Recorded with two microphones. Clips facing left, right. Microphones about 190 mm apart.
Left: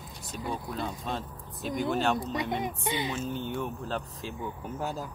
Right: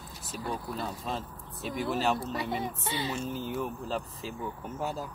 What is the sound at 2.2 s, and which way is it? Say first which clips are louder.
Speech: left 2 dB; 15° left (ahead or behind).